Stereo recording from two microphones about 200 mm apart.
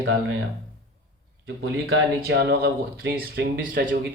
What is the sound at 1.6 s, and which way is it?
Speech, 60° right (ahead or behind).